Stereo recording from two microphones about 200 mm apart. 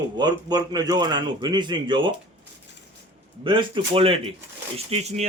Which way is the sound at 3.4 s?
25° right (ahead or behind).